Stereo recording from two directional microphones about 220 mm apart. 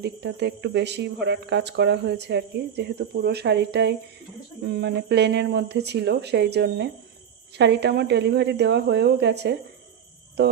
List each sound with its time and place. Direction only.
0.0 s speech: 50° right (ahead or behind)